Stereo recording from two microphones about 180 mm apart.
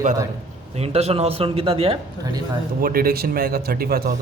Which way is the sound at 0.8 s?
35° right (ahead or behind).